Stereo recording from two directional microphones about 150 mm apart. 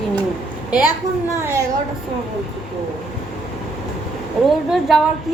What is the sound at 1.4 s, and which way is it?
Speech, 20° right (ahead or behind).